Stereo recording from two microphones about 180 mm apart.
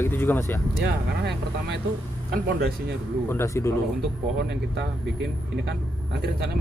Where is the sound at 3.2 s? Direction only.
15° left (ahead or behind).